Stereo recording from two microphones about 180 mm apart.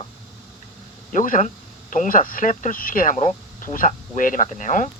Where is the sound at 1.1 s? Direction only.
45° left (ahead or behind).